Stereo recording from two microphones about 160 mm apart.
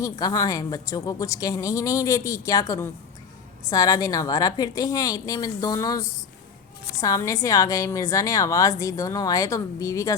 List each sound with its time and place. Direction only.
0.0 s a woman's voice: 20° left (ahead or behind)